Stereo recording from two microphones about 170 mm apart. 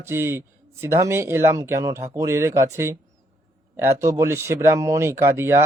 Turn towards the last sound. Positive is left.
turn(degrees=-15)  # may be behind; listen again after turning